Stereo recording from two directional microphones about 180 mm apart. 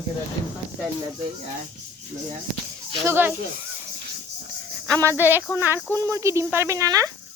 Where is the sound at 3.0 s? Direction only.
10° right (ahead or behind).